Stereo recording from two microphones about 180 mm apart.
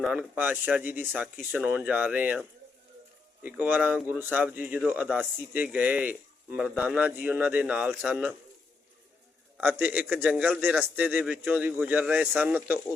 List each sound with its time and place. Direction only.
0.0 s speech: 5° right (ahead or behind)
9.6 s speech: 10° right (ahead or behind)